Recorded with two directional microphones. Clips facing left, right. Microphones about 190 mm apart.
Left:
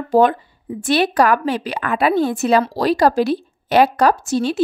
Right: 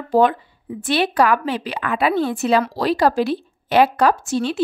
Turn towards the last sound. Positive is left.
turn(degrees=40)  # may be behind; listen again after turning